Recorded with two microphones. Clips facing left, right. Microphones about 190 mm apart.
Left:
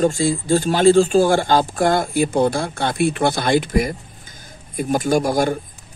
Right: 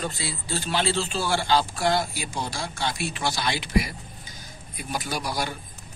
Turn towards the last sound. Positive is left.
turn(degrees=50)  # may be behind; listen again after turning